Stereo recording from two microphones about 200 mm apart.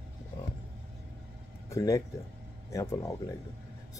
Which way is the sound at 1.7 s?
15° left (ahead or behind).